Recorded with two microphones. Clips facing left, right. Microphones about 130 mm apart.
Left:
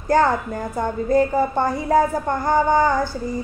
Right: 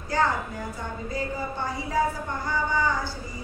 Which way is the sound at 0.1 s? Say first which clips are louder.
Left 7 dB; 55° left (ahead or behind).